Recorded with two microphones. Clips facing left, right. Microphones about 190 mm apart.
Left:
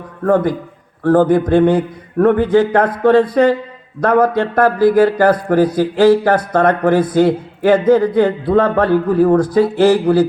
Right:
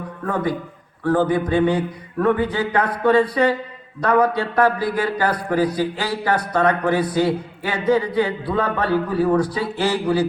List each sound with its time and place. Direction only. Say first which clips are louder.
1.0 s a man's voice: left 7 dB; 45° left (ahead or behind)